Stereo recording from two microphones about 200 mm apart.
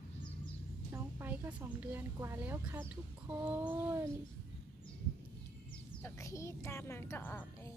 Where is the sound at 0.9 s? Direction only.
10° right (ahead or behind).